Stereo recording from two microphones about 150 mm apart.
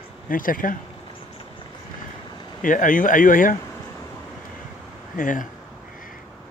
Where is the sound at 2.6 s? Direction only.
60° left (ahead or behind).